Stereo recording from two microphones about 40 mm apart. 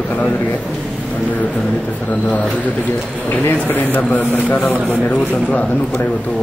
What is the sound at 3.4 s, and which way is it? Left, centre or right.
Speech, left.